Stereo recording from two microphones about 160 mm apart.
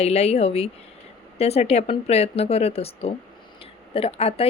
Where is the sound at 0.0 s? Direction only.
40° left (ahead or behind).